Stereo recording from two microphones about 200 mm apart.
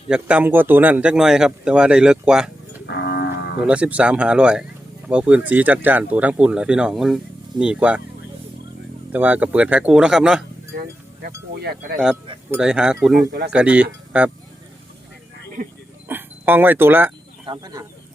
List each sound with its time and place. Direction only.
0.1 s speech: 5° right (ahead or behind)
2.8 s moo: 55° left (ahead or behind)
3.6 s speech: 5° right (ahead or behind)
9.1 s speech: 10° right (ahead or behind)
10.8 s speech: 50° right (ahead or behind)
12.5 s speech: 5° right (ahead or behind)
16.0 s a sound: 10° right (ahead or behind)
17.4 s speech: 20° right (ahead or behind)